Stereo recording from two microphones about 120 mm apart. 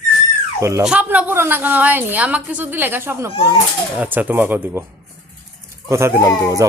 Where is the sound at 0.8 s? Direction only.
5° right (ahead or behind).